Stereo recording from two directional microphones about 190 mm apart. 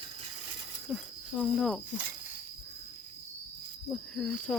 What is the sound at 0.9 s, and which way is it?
Speech, centre (ahead or behind).